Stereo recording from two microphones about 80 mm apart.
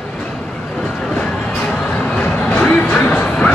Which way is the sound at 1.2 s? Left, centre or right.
Centre.